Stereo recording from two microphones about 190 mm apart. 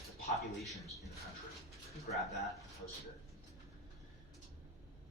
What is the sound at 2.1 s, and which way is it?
Speech, 45° left (ahead or behind).